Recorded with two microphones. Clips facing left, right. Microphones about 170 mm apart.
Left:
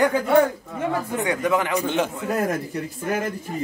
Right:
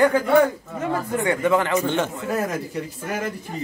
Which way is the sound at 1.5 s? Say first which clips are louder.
Right 1 dB; 10° left (ahead or behind).